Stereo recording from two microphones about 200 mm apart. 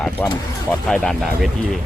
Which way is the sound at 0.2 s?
10° left (ahead or behind).